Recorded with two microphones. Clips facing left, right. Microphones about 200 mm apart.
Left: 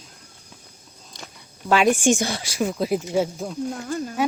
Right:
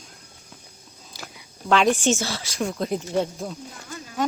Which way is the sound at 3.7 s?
50° left (ahead or behind).